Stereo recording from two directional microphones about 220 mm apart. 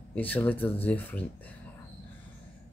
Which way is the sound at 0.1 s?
10° left (ahead or behind).